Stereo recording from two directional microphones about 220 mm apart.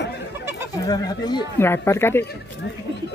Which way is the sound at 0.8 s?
15° left (ahead or behind).